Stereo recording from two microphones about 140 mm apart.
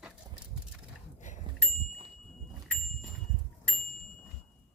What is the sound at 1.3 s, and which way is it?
Bicycle bell, 60° left (ahead or behind).